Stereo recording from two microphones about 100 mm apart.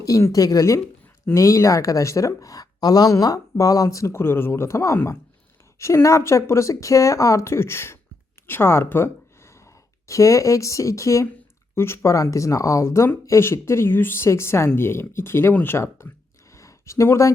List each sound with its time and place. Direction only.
0.0 s speech: 35° left (ahead or behind)